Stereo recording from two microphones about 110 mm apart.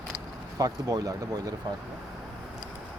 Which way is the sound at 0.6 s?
35° right (ahead or behind).